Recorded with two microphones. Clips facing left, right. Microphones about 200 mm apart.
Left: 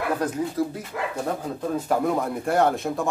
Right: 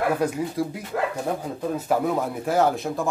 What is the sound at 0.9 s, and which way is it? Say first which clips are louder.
Speech: right 5 dB; 55° right (ahead or behind).